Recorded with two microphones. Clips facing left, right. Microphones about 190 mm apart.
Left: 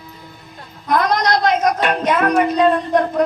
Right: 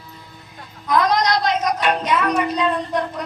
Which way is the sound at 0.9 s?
55° left (ahead or behind).